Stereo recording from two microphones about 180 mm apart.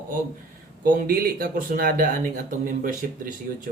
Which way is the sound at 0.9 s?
50° right (ahead or behind).